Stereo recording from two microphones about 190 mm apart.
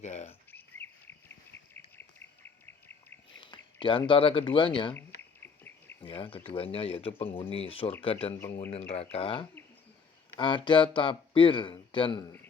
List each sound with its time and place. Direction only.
0.0 s bird: 35° left (ahead or behind)
0.5 s a sound: 10° left (ahead or behind)
2.0 s bird: 10° left (ahead or behind)
3.3 s speech: 25° left (ahead or behind)
5.4 s cricket: 10° left (ahead or behind)
6.0 s speech: 25° left (ahead or behind)